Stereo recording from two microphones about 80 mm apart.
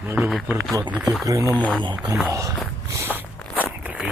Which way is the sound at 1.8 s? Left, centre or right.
Right.